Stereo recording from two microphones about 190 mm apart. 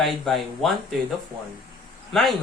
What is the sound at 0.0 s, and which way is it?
Speech, centre (ahead or behind).